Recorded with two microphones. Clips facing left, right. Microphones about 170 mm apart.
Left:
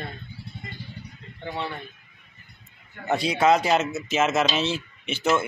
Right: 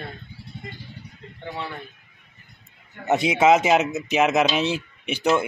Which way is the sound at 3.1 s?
20° right (ahead or behind).